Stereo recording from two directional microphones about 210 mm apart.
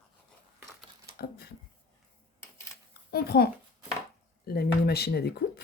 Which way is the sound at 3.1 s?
50° left (ahead or behind).